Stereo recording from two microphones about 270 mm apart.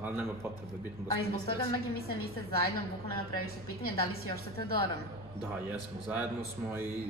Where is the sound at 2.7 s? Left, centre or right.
Centre.